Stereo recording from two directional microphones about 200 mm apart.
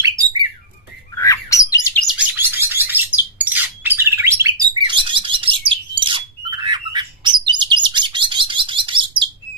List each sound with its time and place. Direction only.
0.1 s bird: 15° right (ahead or behind)
1.1 s bird: 15° left (ahead or behind)
2.0 s bird: 10° right (ahead or behind); by 9.3 s 25° right (ahead or behind)